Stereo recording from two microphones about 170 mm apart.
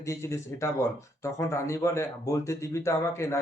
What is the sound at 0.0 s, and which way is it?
A man's voice, 15° left (ahead or behind).